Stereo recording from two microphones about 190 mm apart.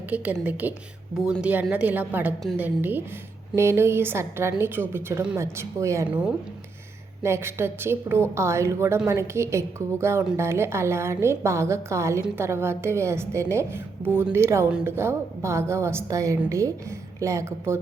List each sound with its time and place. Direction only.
0.1 s a woman's voice: 10° right (ahead or behind)